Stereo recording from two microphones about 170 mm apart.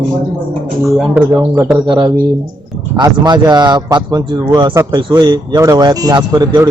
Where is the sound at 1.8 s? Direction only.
30° right (ahead or behind).